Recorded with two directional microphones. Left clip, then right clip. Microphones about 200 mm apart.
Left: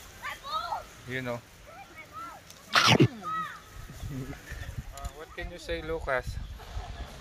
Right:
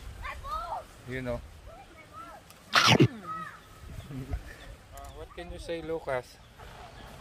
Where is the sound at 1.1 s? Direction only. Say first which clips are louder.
Left 1 dB; centre (ahead or behind).